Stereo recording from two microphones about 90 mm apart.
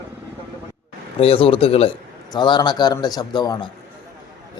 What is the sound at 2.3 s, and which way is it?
Speech, 55° left (ahead or behind).